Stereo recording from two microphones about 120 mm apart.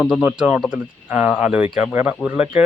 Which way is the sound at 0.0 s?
10° right (ahead or behind).